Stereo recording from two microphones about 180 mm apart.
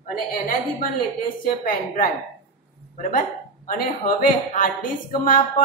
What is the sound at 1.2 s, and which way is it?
Speech, 50° left (ahead or behind).